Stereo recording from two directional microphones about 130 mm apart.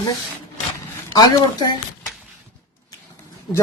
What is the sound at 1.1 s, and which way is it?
Speech, 35° left (ahead or behind).